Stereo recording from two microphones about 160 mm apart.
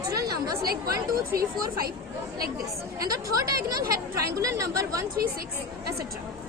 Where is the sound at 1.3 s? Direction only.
70° right (ahead or behind).